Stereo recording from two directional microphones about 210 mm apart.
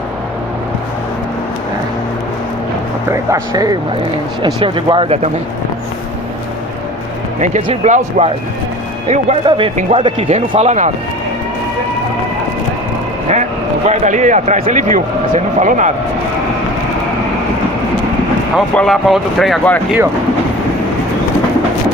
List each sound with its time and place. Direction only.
3.1 s speech: 15° right (ahead or behind)
7.4 s speech: 35° right (ahead or behind)
13.8 s speech: 35° right (ahead or behind)
18.5 s speech: 5° left (ahead or behind)